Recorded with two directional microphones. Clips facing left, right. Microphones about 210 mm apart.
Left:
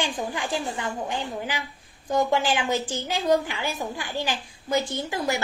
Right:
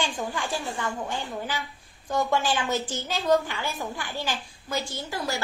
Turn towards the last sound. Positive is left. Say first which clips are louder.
# left 4 dB
turn(degrees=20)  # may be behind; listen again after turning